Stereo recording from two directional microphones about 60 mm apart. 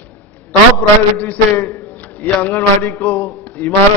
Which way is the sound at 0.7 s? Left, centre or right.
Left.